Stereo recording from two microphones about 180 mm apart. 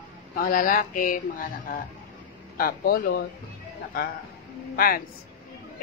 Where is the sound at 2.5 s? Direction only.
55° left (ahead or behind).